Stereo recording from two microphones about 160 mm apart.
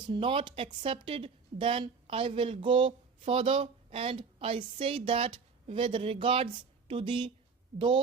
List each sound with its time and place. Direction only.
0.0 s speech: 30° right (ahead or behind)